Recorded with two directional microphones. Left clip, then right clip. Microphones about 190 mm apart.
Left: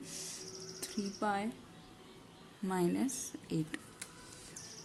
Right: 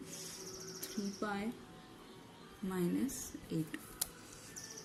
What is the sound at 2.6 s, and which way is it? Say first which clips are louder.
Speech: left 5 dB; 55° left (ahead or behind).